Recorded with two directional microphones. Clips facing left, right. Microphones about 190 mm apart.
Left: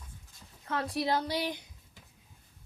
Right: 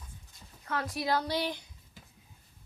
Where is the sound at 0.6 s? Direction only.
25° left (ahead or behind).